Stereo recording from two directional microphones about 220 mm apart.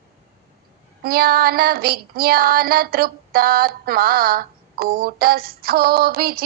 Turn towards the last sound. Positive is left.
turn(degrees=-45)  # may be behind; listen again after turning